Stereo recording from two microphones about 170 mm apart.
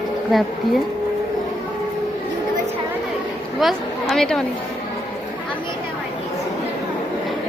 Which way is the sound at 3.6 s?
Centre (ahead or behind).